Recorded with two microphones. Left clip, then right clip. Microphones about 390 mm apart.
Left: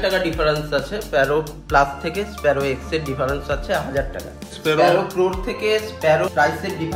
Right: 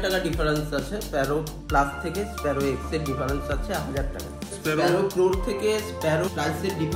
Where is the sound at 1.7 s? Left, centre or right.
Left.